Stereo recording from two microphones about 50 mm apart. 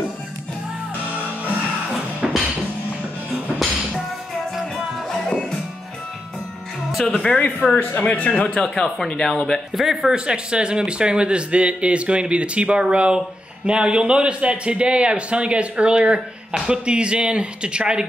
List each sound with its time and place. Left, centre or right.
2.2 s music: centre
6.9 s speech: centre
7.2 s speech: left
7.6 s speech: left; by 9.6 s centre
9.8 s speech: centre